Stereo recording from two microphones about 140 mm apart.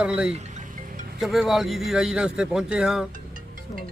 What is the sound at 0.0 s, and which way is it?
Speech, 5° right (ahead or behind).